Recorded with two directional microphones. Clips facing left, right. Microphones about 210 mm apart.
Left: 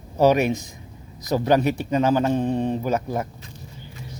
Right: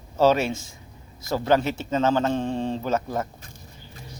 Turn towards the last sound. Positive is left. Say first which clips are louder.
# left 2 dB
turn(degrees=15)  # may be behind; listen again after turning